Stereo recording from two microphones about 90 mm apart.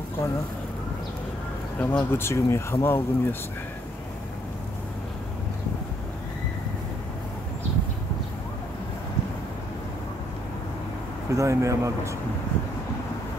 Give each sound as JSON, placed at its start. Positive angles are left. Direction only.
{"t": 1.8, "sound": "speech", "side_deg": 20}
{"t": 11.3, "sound": "speech", "side_deg": -35}